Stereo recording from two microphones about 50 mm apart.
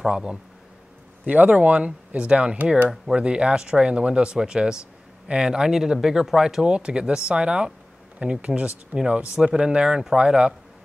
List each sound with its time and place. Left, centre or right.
0.0 s speech: centre
1.2 s speech: right